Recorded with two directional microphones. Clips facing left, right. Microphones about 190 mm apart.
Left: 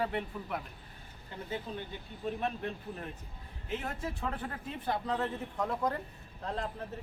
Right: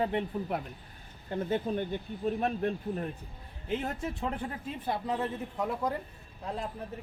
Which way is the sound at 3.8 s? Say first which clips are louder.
Right 4 dB; 25° right (ahead or behind).